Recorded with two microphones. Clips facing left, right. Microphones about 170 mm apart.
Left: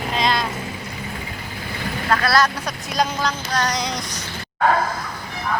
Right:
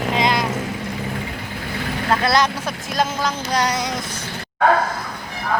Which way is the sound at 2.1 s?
20° right (ahead or behind).